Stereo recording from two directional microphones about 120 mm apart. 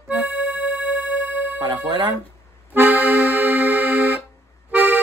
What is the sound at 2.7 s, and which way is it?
Accordion, 10° right (ahead or behind).